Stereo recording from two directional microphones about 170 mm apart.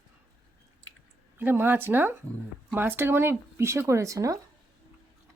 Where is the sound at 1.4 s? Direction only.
10° right (ahead or behind).